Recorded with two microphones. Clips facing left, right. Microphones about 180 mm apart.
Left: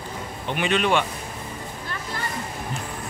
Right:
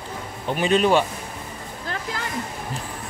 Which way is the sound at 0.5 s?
35° right (ahead or behind).